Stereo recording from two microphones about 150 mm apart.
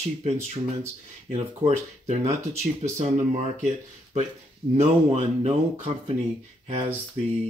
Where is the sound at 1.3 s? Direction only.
45° right (ahead or behind).